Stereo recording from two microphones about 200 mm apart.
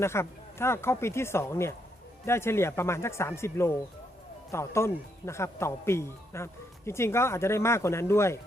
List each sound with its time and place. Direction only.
0.0 s speech: 15° left (ahead or behind)